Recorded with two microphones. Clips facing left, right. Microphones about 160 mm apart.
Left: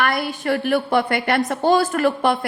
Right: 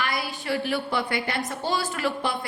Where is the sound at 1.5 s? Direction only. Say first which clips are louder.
Left 10 dB; 50° left (ahead or behind).